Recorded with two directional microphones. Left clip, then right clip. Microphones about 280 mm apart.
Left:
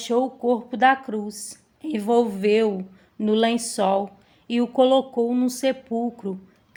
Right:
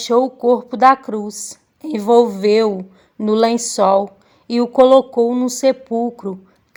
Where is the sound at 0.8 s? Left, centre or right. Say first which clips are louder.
Right 6 dB; right.